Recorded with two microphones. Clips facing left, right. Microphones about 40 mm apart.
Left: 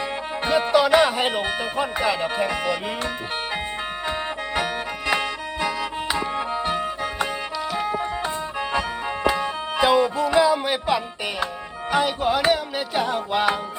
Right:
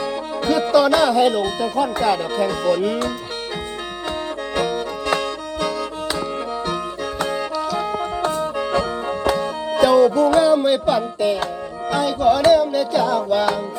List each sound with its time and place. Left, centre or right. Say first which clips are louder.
0.4 s speech: right 3 dB; left
4.5 s music: right 5 dB; left
11.9 s music: right 4 dB; left